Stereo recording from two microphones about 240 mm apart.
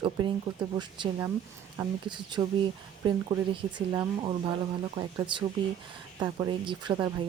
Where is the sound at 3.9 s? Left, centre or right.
Centre.